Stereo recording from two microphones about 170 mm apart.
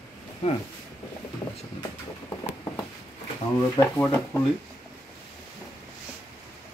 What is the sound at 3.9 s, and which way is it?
Speech, 5° left (ahead or behind).